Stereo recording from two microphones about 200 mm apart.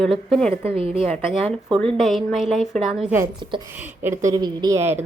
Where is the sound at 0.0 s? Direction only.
Centre (ahead or behind).